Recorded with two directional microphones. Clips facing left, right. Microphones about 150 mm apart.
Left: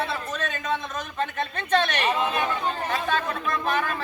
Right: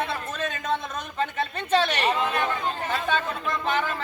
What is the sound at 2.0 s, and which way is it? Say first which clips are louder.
Speech: even; 5° left (ahead or behind).